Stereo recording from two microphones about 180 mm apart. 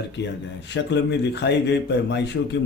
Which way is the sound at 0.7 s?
75° left (ahead or behind).